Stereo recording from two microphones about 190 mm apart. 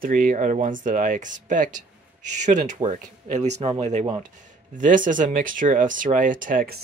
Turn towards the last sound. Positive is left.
turn(degrees=-50)  # may be behind; listen again after turning